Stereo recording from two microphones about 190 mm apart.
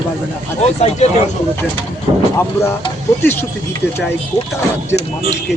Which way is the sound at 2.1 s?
25° right (ahead or behind).